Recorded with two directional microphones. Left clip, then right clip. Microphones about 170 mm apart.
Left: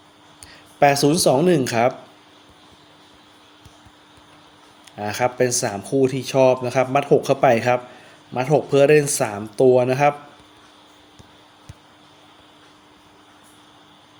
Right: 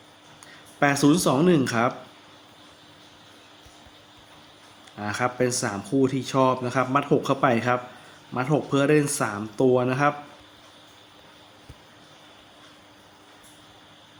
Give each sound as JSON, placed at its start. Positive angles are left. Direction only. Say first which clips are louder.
{"t": 0.8, "sound": "speech", "louder": "left 5 dB", "side_deg": 35}
{"t": 4.9, "sound": "speech", "louder": "left 5 dB", "side_deg": 40}